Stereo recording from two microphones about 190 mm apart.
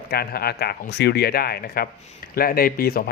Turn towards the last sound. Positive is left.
turn(degrees=55)  # may be behind; listen again after turning